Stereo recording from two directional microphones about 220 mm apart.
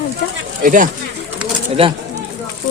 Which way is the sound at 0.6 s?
40° right (ahead or behind).